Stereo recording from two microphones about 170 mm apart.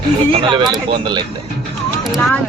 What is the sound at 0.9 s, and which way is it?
Speech, 25° right (ahead or behind).